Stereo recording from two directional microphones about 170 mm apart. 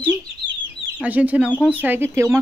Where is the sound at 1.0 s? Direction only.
10° right (ahead or behind).